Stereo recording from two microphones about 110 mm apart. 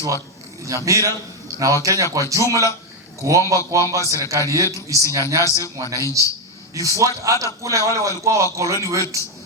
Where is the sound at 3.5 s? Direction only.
30° right (ahead or behind).